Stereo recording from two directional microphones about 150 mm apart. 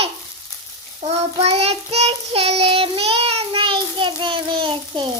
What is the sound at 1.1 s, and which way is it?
Child singing, 45° right (ahead or behind).